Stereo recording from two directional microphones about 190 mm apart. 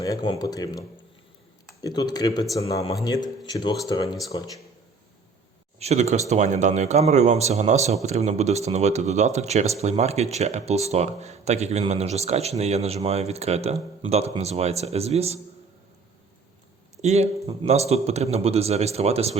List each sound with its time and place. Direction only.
0.0 s a man's voice: 20° left (ahead or behind)
5.8 s speech: 35° right (ahead or behind)
17.0 s speech: 35° right (ahead or behind)